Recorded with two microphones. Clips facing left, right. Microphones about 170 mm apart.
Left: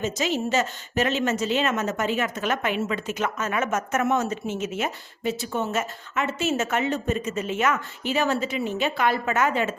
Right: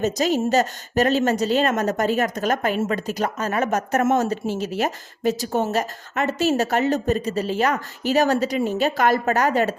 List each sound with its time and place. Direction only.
0.0 s a woman's voice: 40° right (ahead or behind)